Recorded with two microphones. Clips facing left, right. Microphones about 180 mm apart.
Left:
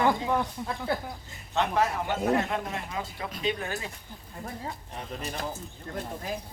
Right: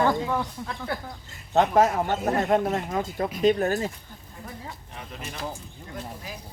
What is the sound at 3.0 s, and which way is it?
Speech, 45° right (ahead or behind).